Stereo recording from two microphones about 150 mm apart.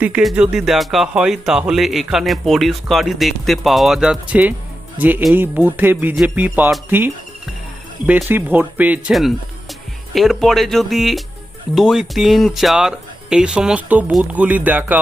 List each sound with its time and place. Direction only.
0.0 s speech: 5° right (ahead or behind)
10.2 s speech: centre (ahead or behind)